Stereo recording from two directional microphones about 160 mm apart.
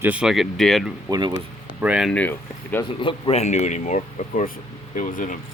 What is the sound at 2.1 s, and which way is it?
Speech, 10° left (ahead or behind).